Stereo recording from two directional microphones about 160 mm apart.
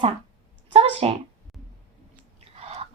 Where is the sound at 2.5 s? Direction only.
40° right (ahead or behind).